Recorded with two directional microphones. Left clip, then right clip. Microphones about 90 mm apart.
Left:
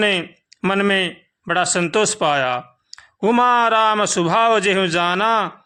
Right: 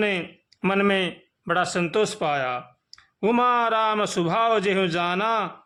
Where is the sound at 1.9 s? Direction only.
45° left (ahead or behind).